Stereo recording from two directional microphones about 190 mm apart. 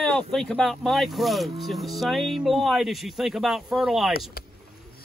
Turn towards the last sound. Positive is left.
turn(degrees=50)  # may be behind; listen again after turning